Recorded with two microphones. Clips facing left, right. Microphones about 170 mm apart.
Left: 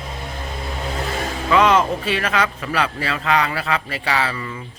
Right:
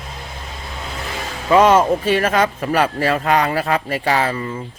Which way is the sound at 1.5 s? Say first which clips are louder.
Right 4 dB; 45° right (ahead or behind).